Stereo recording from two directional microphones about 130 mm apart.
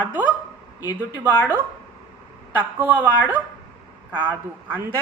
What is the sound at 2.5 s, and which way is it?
Speech, 15° right (ahead or behind).